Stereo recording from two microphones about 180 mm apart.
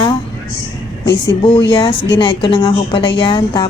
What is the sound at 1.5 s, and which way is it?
Speech, 30° left (ahead or behind).